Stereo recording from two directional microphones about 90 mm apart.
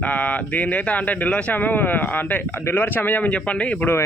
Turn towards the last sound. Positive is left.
turn(degrees=15)  # may be behind; listen again after turning